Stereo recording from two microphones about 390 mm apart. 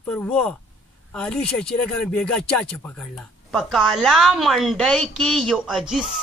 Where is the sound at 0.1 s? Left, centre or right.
Centre.